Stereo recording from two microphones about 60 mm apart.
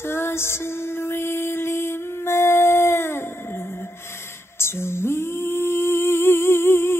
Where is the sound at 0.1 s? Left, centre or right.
Left.